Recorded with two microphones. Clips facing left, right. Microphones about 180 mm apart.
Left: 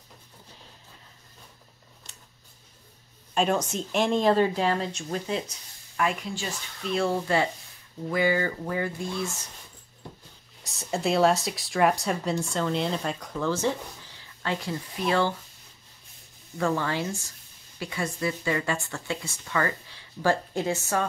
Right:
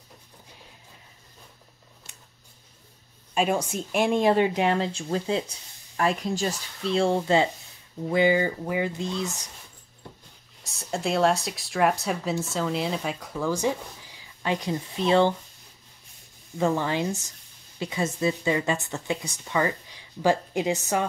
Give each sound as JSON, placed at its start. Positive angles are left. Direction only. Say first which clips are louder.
{"t": 3.3, "sound": "speech", "louder": "even", "side_deg": -10}
{"t": 10.6, "sound": "speech", "louder": "left 1 dB", "side_deg": 0}
{"t": 16.5, "sound": "speech", "louder": "right 2 dB", "side_deg": -20}